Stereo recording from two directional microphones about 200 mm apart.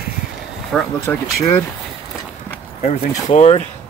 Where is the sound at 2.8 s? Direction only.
35° left (ahead or behind).